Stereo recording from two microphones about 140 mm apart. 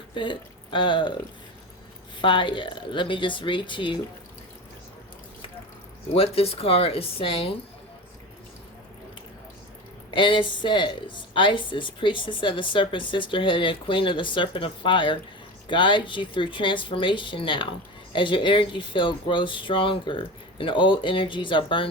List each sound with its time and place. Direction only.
0.1 s speech: 35° left (ahead or behind)
2.2 s a woman's voice: 35° left (ahead or behind)
6.1 s speech: 45° left (ahead or behind)
10.1 s a woman's voice: 35° left (ahead or behind)